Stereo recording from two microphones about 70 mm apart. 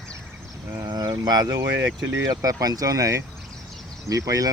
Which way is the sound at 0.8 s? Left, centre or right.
Right.